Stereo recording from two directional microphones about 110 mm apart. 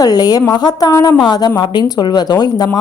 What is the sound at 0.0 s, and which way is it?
A woman's voice, 35° left (ahead or behind).